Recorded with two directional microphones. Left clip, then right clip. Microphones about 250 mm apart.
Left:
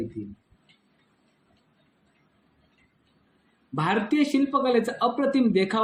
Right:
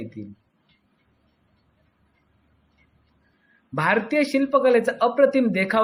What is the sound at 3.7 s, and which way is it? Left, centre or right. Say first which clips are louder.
Speech: right 4 dB; right.